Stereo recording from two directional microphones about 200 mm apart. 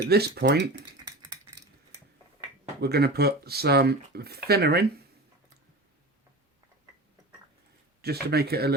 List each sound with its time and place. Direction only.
0.1 s speech: 55° right (ahead or behind)
2.8 s speech: 50° right (ahead or behind)
8.0 s speech: 50° right (ahead or behind)